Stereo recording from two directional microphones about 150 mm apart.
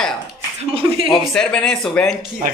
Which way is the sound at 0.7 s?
35° right (ahead or behind).